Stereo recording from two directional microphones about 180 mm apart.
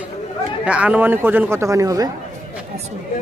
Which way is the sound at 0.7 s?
5° right (ahead or behind).